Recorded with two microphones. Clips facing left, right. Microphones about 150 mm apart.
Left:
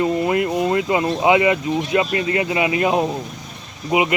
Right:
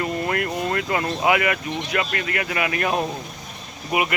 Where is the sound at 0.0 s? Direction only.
20° left (ahead or behind).